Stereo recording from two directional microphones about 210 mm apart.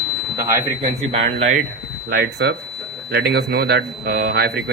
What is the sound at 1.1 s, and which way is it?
Speech, 35° right (ahead or behind).